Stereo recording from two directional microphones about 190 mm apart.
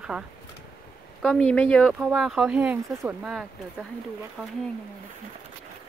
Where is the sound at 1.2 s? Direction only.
5° left (ahead or behind).